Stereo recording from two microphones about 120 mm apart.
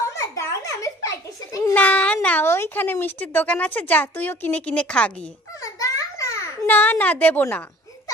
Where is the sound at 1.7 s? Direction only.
15° left (ahead or behind).